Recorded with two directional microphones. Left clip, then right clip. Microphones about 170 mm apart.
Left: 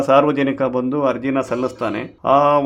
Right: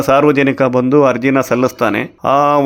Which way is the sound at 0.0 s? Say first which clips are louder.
Right 4 dB; 20° right (ahead or behind).